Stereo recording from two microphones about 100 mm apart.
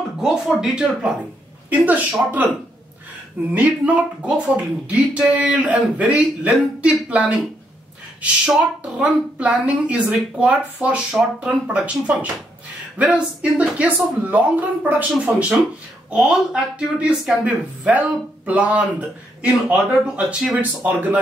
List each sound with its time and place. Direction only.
0.2 s speech: 5° right (ahead or behind)
2.1 s speech: 15° right (ahead or behind)
3.5 s speech: 15° right (ahead or behind)